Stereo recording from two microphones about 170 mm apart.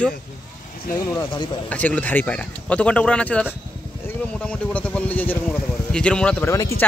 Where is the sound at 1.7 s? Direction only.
10° left (ahead or behind).